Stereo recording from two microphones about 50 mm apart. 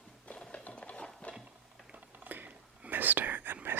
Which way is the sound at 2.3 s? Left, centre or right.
Right.